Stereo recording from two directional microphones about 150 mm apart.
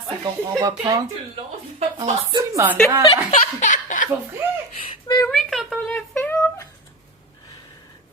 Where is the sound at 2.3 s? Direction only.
20° right (ahead or behind).